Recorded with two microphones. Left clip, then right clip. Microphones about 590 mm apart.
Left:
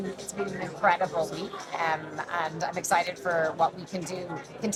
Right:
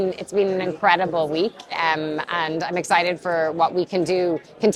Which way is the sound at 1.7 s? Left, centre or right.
Right.